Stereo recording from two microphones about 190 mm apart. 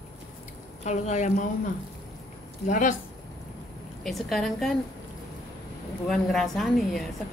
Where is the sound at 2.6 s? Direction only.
45° left (ahead or behind).